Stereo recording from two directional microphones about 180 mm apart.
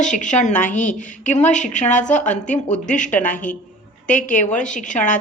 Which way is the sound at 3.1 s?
10° left (ahead or behind).